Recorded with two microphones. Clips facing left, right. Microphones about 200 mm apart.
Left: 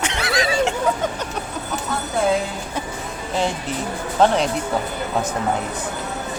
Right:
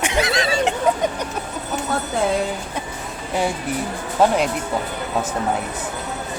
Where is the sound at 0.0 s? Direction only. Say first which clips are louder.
Right 2 dB; 15° right (ahead or behind).